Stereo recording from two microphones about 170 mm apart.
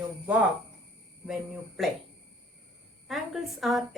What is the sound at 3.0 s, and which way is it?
Speech, centre (ahead or behind).